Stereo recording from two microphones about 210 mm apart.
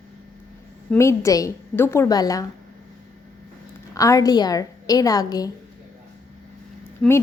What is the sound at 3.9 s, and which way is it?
A woman's voice, 15° left (ahead or behind).